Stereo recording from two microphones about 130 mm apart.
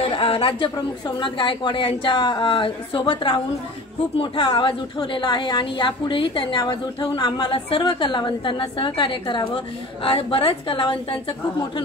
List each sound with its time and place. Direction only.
0.0 s a woman's voice: 45° left (ahead or behind)